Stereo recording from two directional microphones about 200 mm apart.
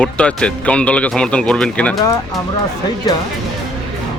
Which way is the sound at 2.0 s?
15° left (ahead or behind).